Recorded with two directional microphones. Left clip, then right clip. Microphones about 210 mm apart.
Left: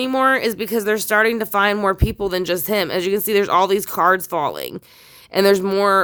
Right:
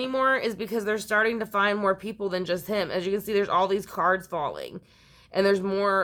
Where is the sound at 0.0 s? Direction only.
45° left (ahead or behind).